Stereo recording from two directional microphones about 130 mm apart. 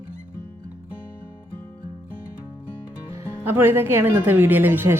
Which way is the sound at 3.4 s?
15° right (ahead or behind).